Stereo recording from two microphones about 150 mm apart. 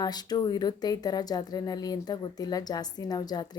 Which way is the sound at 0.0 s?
25° left (ahead or behind).